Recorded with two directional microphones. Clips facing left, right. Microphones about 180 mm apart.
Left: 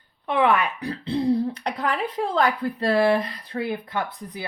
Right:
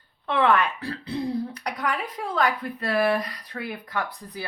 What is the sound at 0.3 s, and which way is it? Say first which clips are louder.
Speech: left 1 dB; 15° left (ahead or behind).